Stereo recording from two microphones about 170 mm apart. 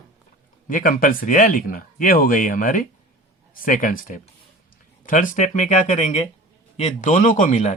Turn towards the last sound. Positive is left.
turn(degrees=45)  # may be behind; listen again after turning